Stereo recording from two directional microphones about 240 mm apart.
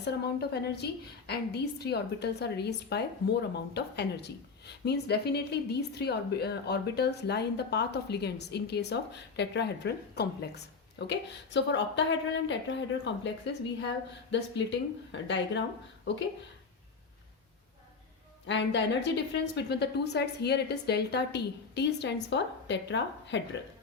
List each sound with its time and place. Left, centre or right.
0.0 s a woman's voice: left
18.4 s a woman's voice: left